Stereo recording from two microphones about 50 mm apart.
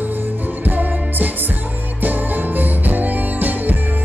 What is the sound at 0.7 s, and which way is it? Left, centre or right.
Music, right.